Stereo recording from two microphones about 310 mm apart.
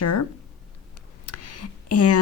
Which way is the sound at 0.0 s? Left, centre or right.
Left.